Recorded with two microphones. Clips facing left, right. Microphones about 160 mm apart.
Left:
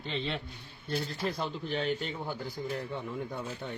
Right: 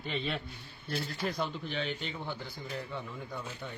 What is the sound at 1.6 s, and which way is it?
Speech, 40° left (ahead or behind).